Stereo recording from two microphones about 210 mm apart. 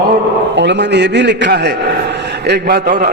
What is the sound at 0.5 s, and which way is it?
A man's voice, 55° right (ahead or behind).